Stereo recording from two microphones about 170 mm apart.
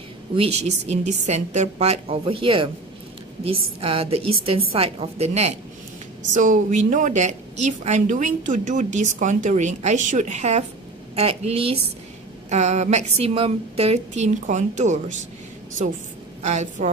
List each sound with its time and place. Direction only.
0.4 s a woman's voice: 40° right (ahead or behind)
16.4 s a woman's voice: 45° right (ahead or behind)